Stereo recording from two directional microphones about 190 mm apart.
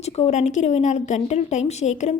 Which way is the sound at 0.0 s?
35° left (ahead or behind).